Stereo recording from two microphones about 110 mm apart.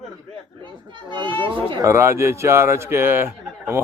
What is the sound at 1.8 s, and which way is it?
A man's voice, 25° right (ahead or behind).